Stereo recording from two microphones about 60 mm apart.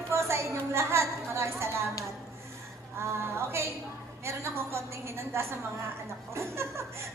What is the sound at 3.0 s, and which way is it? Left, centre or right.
Speech, right.